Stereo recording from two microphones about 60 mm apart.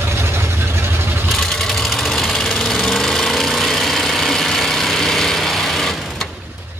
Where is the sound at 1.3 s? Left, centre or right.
Centre.